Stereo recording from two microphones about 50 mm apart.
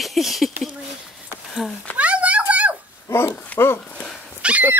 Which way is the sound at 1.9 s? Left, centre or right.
Right.